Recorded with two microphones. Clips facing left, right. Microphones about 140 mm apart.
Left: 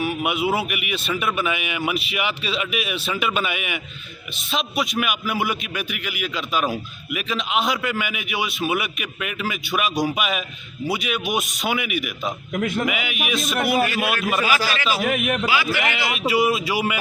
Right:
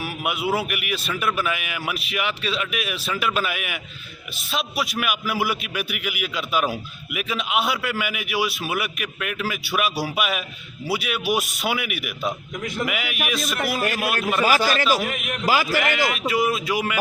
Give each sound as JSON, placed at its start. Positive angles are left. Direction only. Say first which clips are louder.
{"t": 0.0, "sound": "a man's voice", "louder": "left 4 dB", "side_deg": 0}
{"t": 12.5, "sound": "a man's voice", "louder": "left 7 dB", "side_deg": 65}
{"t": 12.8, "sound": "a man's voice", "louder": "left 1 dB", "side_deg": 0}
{"t": 13.8, "sound": "a man's voice", "louder": "left 1 dB", "side_deg": -45}
{"t": 15.0, "sound": "a man's voice", "louder": "left 6 dB", "side_deg": 60}
{"t": 15.4, "sound": "a man's voice", "louder": "right 2 dB", "side_deg": -40}
{"t": 16.1, "sound": "a man's voice", "louder": "left 2 dB", "side_deg": 5}